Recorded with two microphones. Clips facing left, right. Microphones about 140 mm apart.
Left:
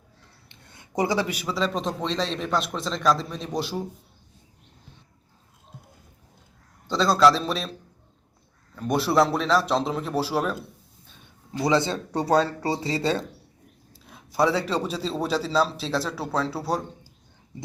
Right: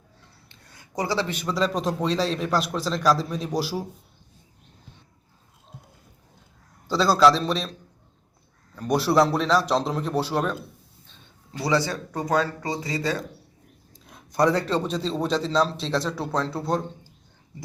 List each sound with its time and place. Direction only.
0.4 s a man's voice: 25° left (ahead or behind); by 3.8 s 5° right (ahead or behind)
6.8 s a man's voice: centre (ahead or behind)
8.7 s a man's voice: centre (ahead or behind)
11.0 s a sound: 10° left (ahead or behind)
11.6 s speech: 20° left (ahead or behind)
13.9 s a man's voice: 5° left (ahead or behind)